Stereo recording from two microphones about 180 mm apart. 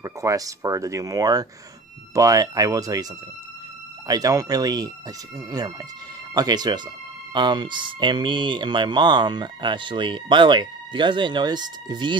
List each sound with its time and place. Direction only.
0.0 s speech: 20° right (ahead or behind)
4.1 s speech: 20° right (ahead or behind)
6.3 s speech: 20° right (ahead or behind)